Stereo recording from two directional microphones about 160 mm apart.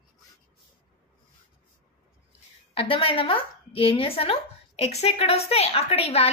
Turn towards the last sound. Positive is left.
turn(degrees=40)  # may be behind; listen again after turning